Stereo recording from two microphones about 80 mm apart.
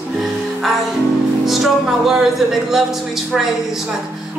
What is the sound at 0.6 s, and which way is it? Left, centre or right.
A woman's voice, centre.